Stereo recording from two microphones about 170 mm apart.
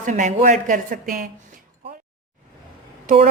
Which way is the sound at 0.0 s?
45° right (ahead or behind).